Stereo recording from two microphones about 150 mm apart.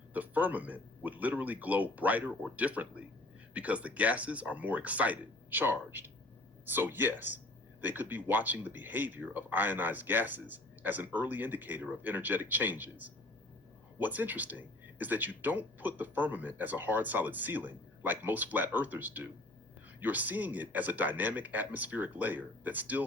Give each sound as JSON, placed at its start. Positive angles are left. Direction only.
{"t": 0.1, "sound": "speech", "side_deg": -10}